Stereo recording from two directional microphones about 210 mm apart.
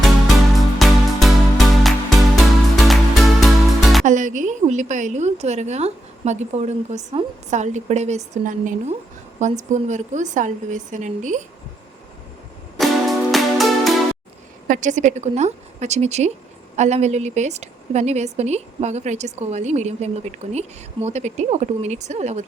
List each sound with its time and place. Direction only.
0.5 s music: centre (ahead or behind)
4.0 s a woman's voice: 35° right (ahead or behind)
12.8 s music: centre (ahead or behind)
14.7 s a woman's voice: 35° right (ahead or behind)